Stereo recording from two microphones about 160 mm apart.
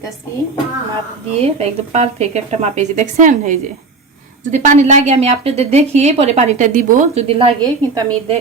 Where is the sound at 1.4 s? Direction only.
40° right (ahead or behind).